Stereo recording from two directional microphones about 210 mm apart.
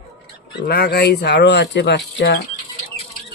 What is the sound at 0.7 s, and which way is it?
Speech, 50° left (ahead or behind).